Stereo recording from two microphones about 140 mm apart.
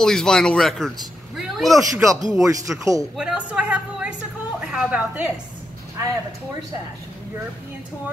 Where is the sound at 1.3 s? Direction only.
Centre (ahead or behind).